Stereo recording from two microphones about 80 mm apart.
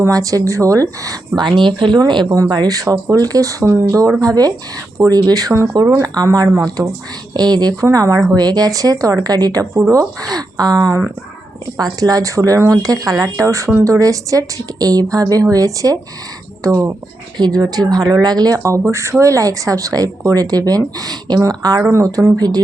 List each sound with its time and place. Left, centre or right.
0.1 s speech: right
1.4 s speech: right
2.0 s speech: right
2.5 s speech: right
7.8 s speech: right
17.3 s speech: right
18.9 s speech: right
21.9 s speech: right